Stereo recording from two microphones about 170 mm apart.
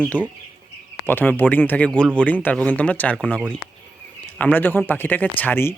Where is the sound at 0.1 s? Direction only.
10° right (ahead or behind).